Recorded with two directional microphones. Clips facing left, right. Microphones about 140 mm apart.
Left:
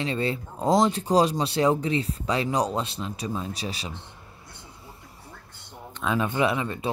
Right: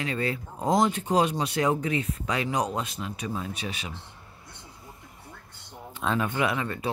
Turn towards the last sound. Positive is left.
turn(degrees=20)  # may be behind; listen again after turning